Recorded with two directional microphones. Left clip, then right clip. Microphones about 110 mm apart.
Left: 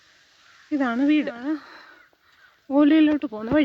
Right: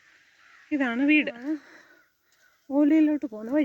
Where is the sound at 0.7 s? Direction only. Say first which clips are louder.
Left 1 dB; centre (ahead or behind).